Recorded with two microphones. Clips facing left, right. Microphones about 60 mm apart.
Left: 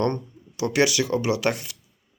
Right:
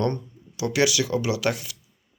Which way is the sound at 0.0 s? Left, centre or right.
Left.